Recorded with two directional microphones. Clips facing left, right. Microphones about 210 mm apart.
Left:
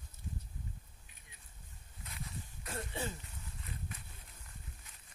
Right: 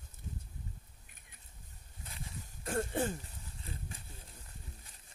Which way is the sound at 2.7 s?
50° right (ahead or behind).